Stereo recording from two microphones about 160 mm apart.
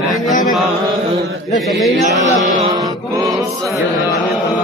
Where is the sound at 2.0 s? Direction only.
45° right (ahead or behind).